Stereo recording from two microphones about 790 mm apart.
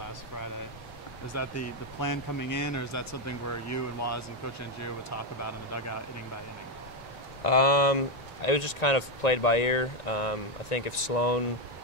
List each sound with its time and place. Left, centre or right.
1.3 s speech: centre
7.4 s speech: left